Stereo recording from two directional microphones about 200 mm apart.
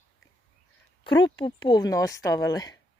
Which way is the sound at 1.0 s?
20° left (ahead or behind).